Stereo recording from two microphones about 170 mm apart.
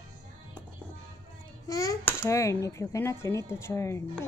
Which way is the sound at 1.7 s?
20° left (ahead or behind).